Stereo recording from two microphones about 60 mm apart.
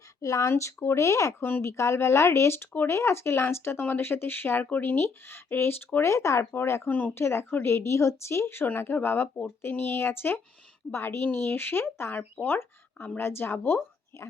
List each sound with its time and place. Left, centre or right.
0.2 s speech: left
0.5 s speech: left
1.4 s a woman's voice: left
1.6 s a woman's voice: left
6.1 s speech: left
6.5 s speech: left
6.8 s a woman's voice: left